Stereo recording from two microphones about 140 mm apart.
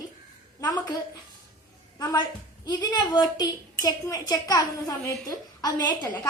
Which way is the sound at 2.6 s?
30° left (ahead or behind).